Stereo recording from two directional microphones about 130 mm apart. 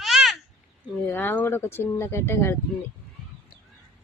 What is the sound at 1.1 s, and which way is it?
Speech, 15° left (ahead or behind).